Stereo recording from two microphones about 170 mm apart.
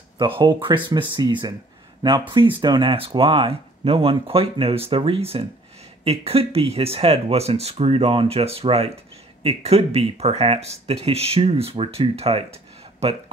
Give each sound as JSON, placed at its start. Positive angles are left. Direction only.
{"t": 0.4, "sound": "speech", "side_deg": -30}